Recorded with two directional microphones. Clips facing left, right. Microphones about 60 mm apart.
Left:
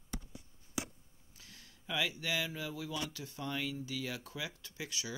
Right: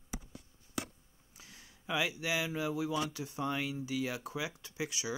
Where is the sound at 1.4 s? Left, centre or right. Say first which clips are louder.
Right 2 dB; centre.